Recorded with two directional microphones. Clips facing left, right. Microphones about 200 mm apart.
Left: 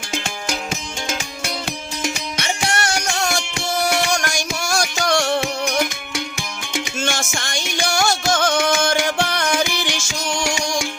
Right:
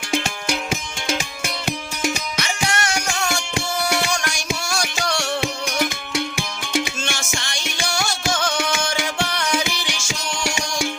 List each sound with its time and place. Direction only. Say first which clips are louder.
2.4 s music: left 2 dB; 30° left (ahead or behind)
4.7 s music: left 8 dB; 45° left (ahead or behind)
7.3 s music: left 3 dB; 50° left (ahead or behind)